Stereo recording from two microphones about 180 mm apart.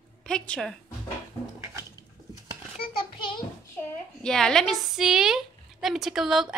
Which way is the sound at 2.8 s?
25° left (ahead or behind).